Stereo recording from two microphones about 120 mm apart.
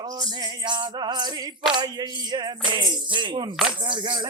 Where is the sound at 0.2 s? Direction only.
35° right (ahead or behind).